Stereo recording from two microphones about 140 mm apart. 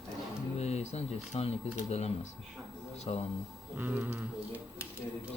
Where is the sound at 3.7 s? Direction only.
10° right (ahead or behind).